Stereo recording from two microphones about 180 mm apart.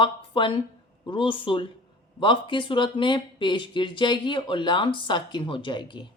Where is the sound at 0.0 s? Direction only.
25° left (ahead or behind).